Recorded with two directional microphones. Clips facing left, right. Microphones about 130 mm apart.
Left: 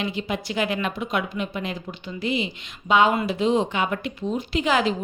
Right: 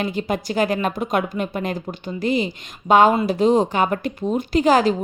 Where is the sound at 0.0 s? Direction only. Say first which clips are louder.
Right 4 dB; 45° right (ahead or behind).